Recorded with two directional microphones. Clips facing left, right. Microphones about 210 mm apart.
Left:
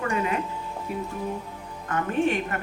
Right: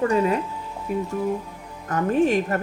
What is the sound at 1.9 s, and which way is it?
Speech, 40° right (ahead or behind).